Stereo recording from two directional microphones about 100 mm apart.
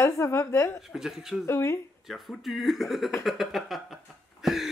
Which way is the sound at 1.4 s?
25° left (ahead or behind).